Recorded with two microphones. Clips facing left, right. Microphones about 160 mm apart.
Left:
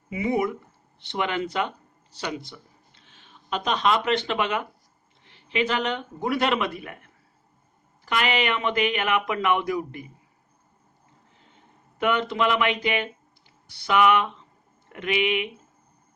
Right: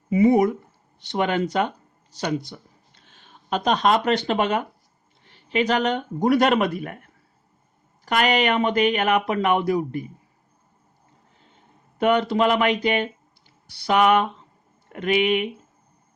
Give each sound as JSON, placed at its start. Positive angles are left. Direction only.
{"t": 0.1, "sound": "speech", "side_deg": -40}
{"t": 11.9, "sound": "speech", "side_deg": -40}